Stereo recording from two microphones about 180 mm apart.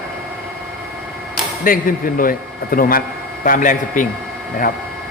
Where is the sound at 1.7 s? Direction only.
50° left (ahead or behind).